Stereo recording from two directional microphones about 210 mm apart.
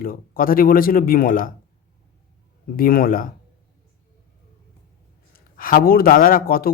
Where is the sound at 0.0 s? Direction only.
45° left (ahead or behind).